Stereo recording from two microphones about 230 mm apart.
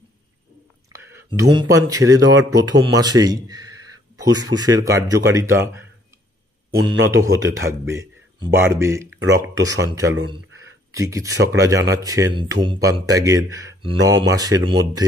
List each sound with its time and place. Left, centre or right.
0.9 s speech: centre
7.0 s speech: centre